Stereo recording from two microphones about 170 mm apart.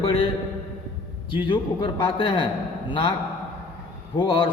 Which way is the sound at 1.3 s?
30° left (ahead or behind).